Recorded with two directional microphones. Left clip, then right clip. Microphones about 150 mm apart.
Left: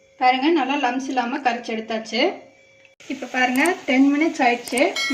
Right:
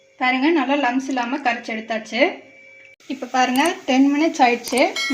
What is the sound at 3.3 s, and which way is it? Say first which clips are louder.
Speech: right 1 dB; 45° right (ahead or behind).